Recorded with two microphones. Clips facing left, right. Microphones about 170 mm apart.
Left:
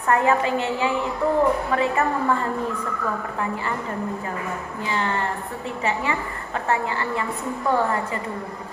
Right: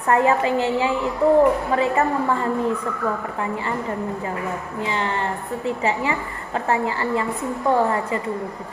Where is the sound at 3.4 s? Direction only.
25° right (ahead or behind).